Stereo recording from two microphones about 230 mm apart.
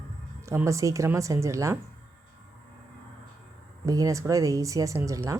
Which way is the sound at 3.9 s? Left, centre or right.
Centre.